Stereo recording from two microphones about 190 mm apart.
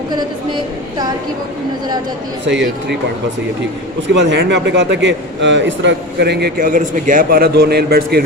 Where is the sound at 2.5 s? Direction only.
65° right (ahead or behind).